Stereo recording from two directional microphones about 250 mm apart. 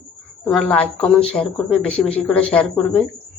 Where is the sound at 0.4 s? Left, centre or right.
Centre.